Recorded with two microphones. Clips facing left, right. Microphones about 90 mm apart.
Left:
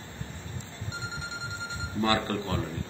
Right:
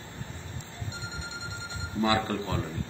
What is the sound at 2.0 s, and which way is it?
Speech, 10° right (ahead or behind).